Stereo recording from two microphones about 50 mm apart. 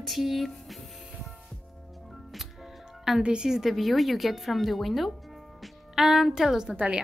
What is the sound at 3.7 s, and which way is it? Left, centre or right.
A woman's voice, centre.